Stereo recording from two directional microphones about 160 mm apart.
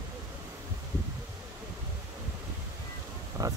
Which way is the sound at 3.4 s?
20° right (ahead or behind).